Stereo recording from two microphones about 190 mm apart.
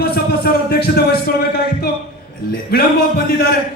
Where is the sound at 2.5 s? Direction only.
55° left (ahead or behind).